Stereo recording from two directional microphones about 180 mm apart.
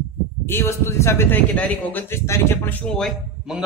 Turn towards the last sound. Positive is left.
turn(degrees=0)  # may be behind; listen again after turning